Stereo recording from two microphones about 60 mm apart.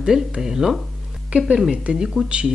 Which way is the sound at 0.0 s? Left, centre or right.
Centre.